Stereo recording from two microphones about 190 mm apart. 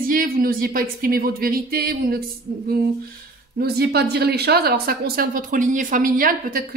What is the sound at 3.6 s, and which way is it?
A woman's voice, 55° right (ahead or behind).